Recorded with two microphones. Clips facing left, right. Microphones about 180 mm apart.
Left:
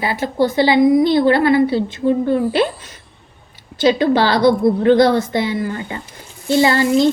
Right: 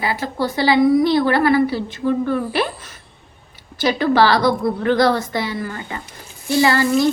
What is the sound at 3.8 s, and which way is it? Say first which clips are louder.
A woman's voice: left 2 dB; 25° left (ahead or behind).